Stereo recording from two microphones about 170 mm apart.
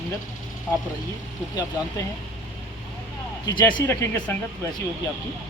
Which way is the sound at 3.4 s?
25° left (ahead or behind).